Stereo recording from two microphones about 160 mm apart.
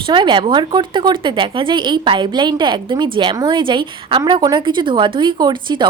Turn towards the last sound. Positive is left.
turn(degrees=-30)  # may be behind; listen again after turning